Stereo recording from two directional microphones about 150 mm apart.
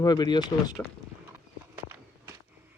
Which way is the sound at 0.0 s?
25° left (ahead or behind).